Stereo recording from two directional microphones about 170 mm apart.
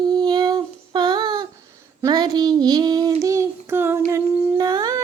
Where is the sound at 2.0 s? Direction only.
25° right (ahead or behind).